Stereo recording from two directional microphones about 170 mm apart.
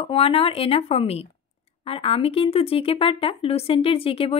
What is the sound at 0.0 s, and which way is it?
Speech, 35° left (ahead or behind).